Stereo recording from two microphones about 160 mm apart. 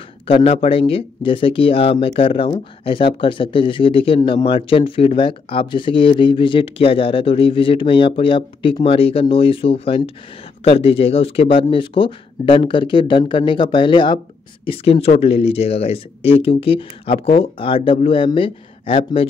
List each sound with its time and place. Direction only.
0.3 s speech: 35° left (ahead or behind)